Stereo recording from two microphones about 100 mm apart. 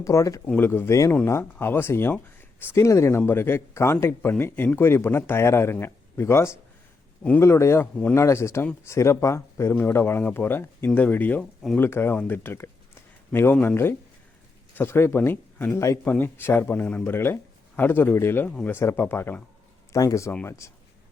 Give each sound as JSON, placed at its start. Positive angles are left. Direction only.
{"t": 0.0, "sound": "speech", "side_deg": 30}
{"t": 0.4, "sound": "speech", "side_deg": 20}
{"t": 7.2, "sound": "speech", "side_deg": 15}
{"t": 7.4, "sound": "speech", "side_deg": 30}